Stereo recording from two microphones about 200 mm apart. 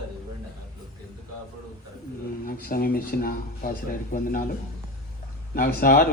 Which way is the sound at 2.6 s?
45° left (ahead or behind).